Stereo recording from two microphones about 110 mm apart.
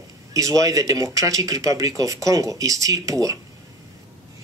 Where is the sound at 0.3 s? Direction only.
30° right (ahead or behind).